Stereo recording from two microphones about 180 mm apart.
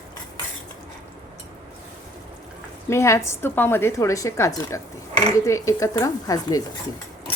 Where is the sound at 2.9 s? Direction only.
15° left (ahead or behind).